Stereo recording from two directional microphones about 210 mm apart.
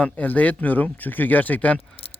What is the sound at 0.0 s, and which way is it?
Speech, 5° left (ahead or behind).